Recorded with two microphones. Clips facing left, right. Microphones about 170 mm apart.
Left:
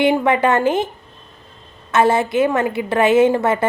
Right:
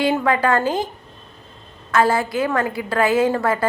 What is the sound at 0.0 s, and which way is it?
Speech, 20° left (ahead or behind).